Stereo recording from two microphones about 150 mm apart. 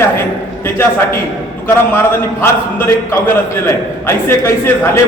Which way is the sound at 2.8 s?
15° left (ahead or behind).